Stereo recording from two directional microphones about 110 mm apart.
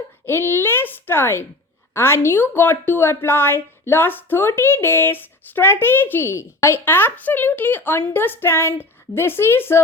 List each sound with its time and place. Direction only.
0.3 s a woman's voice: 20° left (ahead or behind)